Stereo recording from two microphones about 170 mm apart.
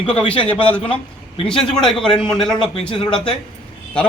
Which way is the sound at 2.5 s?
25° left (ahead or behind).